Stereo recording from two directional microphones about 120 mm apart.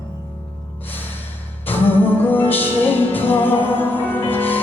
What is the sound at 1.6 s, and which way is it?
Music, 15° left (ahead or behind).